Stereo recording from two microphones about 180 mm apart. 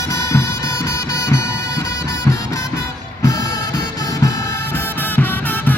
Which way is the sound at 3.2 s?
20° left (ahead or behind).